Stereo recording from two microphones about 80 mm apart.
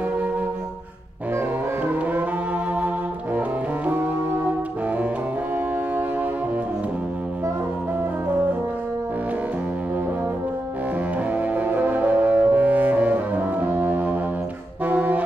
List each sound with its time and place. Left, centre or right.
3.3 s music: right
11.5 s music: right
14.9 s brass instrument: centre